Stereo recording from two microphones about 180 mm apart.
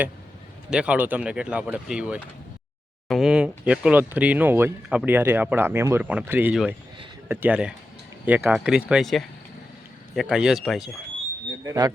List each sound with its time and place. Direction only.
0.7 s speech: 5° right (ahead or behind)
11.6 s speech: 20° right (ahead or behind)